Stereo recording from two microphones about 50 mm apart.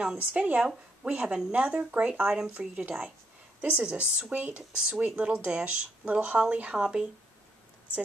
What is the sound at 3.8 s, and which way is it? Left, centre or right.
Speech, right.